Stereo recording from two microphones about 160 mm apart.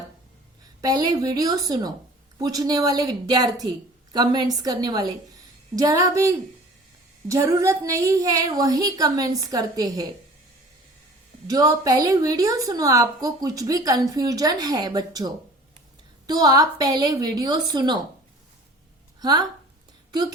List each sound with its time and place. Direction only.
0.8 s a woman's voice: 25° right (ahead or behind)
11.4 s a woman's voice: 20° right (ahead or behind)
19.2 s a woman's voice: 25° right (ahead or behind)